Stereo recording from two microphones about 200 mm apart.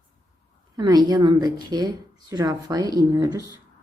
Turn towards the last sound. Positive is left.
turn(degrees=-20)  # may be behind; listen again after turning